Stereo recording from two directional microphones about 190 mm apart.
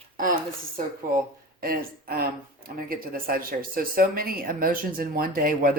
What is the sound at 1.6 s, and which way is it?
Speech, 50° right (ahead or behind).